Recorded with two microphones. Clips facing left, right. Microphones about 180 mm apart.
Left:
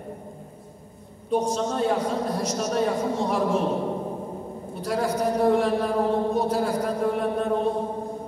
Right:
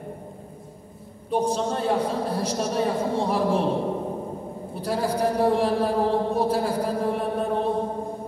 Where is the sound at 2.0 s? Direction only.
30° right (ahead or behind).